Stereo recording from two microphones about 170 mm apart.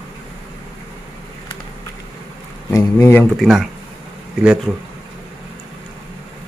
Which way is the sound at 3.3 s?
Centre (ahead or behind).